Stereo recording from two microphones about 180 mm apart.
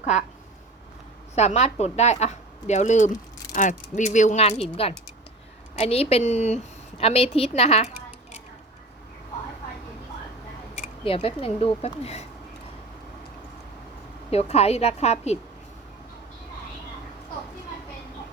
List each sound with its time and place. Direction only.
0.0 s speech: 40° left (ahead or behind)
1.4 s a woman's voice: 40° left (ahead or behind)
11.0 s a woman's voice: 30° left (ahead or behind)
14.3 s a woman's voice: 35° left (ahead or behind)